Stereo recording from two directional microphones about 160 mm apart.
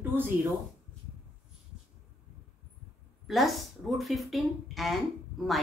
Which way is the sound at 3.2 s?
Centre (ahead or behind).